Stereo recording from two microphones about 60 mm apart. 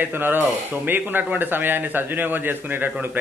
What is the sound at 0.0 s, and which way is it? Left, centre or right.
A man's voice, right.